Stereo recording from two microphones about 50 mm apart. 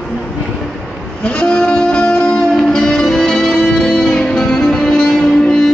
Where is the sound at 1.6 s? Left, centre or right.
Centre.